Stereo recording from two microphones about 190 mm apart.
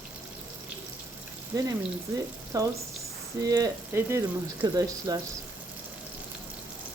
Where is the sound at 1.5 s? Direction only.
20° right (ahead or behind).